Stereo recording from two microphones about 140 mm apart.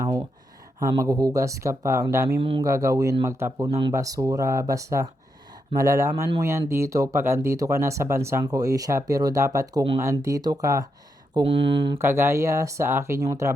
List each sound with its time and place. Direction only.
0.0 s a sound: 25° right (ahead or behind)
0.8 s speech: 20° right (ahead or behind)
2.4 s speech: 40° right (ahead or behind)
2.6 s speech: 25° right (ahead or behind)
11.3 s speech: 40° right (ahead or behind)
11.9 s speech: 20° right (ahead or behind)